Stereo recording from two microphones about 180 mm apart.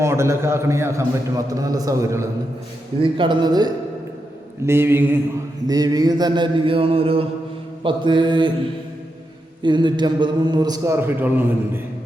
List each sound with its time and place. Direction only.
0.0 s a man's voice: 15° right (ahead or behind)
9.6 s a man's voice: 25° right (ahead or behind)